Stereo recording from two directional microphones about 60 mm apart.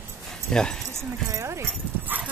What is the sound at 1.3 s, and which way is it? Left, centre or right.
Clip-clop, right.